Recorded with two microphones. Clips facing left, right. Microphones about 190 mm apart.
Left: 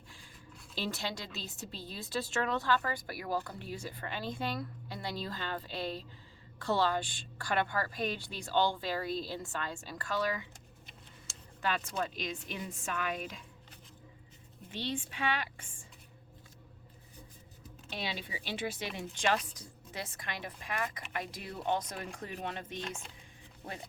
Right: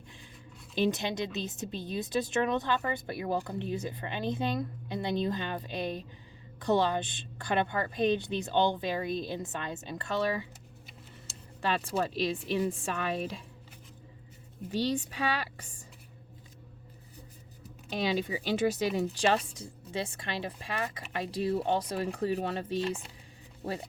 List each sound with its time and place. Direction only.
0.8 s a woman's voice: 20° right (ahead or behind)
11.6 s speech: 30° right (ahead or behind)
14.7 s speech: 40° right (ahead or behind)
17.8 s a woman's voice: 45° right (ahead or behind)